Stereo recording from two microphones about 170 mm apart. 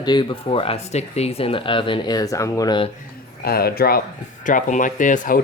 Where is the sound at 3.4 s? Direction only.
65° left (ahead or behind).